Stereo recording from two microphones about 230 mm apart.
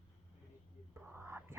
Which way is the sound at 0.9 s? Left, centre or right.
Centre.